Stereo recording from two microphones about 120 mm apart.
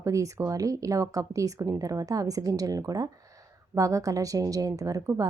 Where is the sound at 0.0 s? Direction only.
25° right (ahead or behind).